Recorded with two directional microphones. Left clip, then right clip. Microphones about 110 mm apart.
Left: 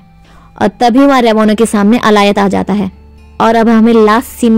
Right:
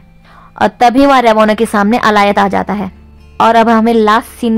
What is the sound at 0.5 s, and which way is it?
Speech, 20° left (ahead or behind).